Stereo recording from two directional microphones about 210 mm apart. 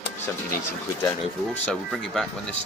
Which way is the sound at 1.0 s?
10° left (ahead or behind).